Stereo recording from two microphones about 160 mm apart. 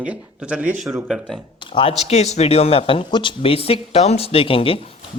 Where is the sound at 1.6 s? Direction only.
30° left (ahead or behind).